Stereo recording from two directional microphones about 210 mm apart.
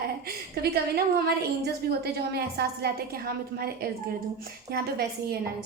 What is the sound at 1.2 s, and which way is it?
A woman's voice, 50° right (ahead or behind).